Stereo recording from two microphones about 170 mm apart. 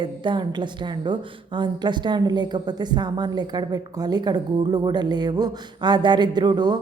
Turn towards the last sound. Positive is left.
turn(degrees=-25)  # may be behind; listen again after turning